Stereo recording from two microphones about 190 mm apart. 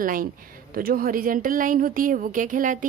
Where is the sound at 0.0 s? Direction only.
45° right (ahead or behind).